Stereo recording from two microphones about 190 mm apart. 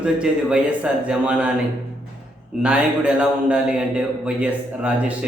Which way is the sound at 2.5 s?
5° right (ahead or behind).